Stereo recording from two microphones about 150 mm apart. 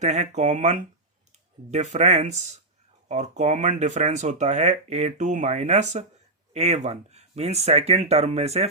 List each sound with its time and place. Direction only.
0.0 s speech: 50° right (ahead or behind)